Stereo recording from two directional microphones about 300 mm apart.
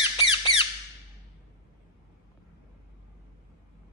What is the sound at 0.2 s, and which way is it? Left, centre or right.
Squeak, centre.